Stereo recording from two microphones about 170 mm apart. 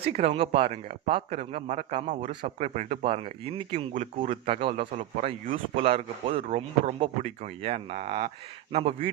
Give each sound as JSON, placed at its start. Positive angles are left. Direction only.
{"t": 0.1, "sound": "speech", "side_deg": -35}
{"t": 4.4, "sound": "speech", "side_deg": -30}
{"t": 4.8, "sound": "speech", "side_deg": -45}